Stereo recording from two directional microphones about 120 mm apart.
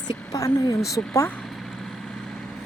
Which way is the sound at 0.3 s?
30° left (ahead or behind).